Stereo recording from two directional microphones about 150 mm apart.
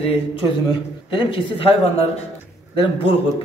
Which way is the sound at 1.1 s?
35° left (ahead or behind).